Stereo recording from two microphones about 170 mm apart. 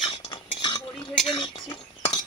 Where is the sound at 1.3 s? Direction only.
30° left (ahead or behind).